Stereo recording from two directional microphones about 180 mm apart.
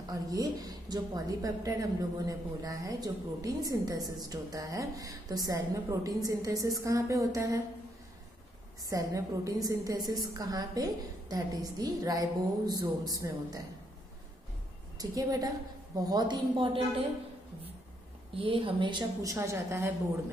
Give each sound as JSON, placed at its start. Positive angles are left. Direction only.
{"t": 0.1, "sound": "a woman's voice", "side_deg": -20}
{"t": 8.8, "sound": "a woman's voice", "side_deg": -20}
{"t": 15.0, "sound": "a woman's voice", "side_deg": -20}
{"t": 18.3, "sound": "a woman's voice", "side_deg": -30}